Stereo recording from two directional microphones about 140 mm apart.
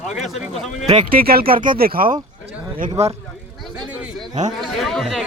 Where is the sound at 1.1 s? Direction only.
90° right.